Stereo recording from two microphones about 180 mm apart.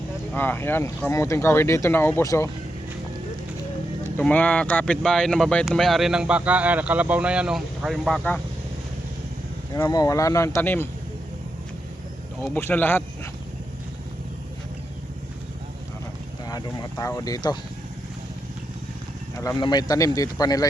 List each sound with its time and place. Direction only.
0.3 s speech: 10° left (ahead or behind)
4.2 s speech: 10° left (ahead or behind)
9.7 s speech: 20° left (ahead or behind)
12.4 s speech: 10° left (ahead or behind)
16.5 s speech: 20° left (ahead or behind)
19.4 s speech: 20° left (ahead or behind)